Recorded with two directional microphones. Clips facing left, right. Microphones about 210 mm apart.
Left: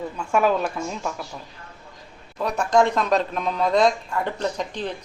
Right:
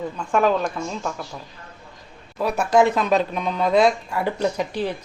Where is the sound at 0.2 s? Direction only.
10° left (ahead or behind).